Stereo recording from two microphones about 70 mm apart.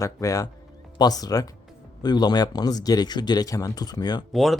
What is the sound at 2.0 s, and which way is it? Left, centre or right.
Speech, left.